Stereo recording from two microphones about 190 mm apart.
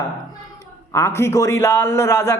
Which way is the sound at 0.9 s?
15° left (ahead or behind).